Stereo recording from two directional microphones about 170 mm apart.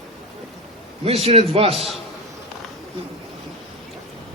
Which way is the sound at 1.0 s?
35° right (ahead or behind).